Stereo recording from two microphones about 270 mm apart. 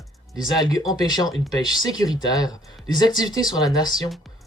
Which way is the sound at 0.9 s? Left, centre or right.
Centre.